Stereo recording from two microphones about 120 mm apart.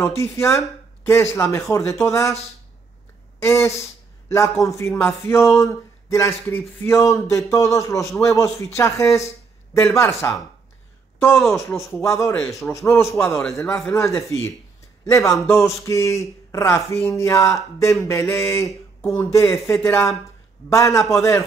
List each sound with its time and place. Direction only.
0.0 s a man's voice: 25° left (ahead or behind)